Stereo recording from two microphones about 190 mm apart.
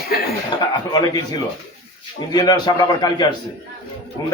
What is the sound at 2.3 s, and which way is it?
Speech, 20° left (ahead or behind).